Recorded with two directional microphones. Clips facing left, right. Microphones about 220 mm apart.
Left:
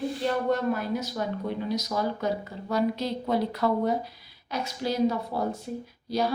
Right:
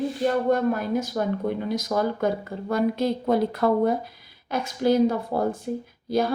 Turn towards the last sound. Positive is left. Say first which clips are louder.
# right 4 dB
turn(degrees=-50)  # may be behind; listen again after turning